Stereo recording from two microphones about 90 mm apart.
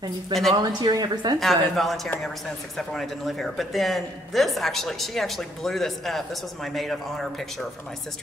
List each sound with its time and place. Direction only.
0.3 s speech: centre (ahead or behind)
0.6 s speech: 50° right (ahead or behind)
1.4 s speech: centre (ahead or behind)